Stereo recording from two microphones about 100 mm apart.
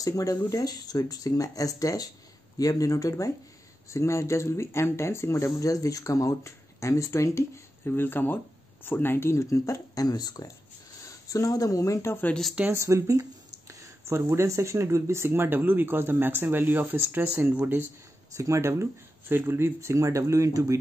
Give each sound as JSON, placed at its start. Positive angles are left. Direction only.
{"t": 0.0, "sound": "speech", "side_deg": 35}
{"t": 12.7, "sound": "speech", "side_deg": -30}
{"t": 18.3, "sound": "speech", "side_deg": -30}